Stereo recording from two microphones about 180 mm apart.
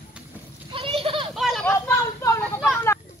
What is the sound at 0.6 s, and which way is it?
Children playing, 30° right (ahead or behind).